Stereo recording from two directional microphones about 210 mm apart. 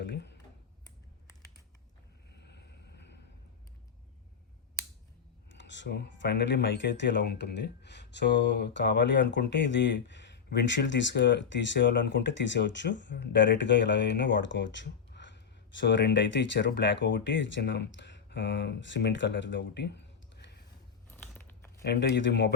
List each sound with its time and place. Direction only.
0.0 s computer keyboard: 55° left (ahead or behind)
2.3 s vehicle: 55° left (ahead or behind)
5.5 s speech: 55° left (ahead or behind)
21.1 s biting: 10° left (ahead or behind)
21.8 s speech: 55° left (ahead or behind)